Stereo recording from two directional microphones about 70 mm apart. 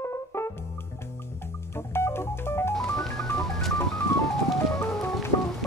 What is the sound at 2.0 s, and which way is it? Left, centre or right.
Music, left.